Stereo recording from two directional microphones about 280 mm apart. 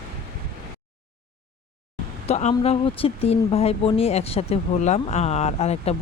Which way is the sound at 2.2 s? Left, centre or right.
Left.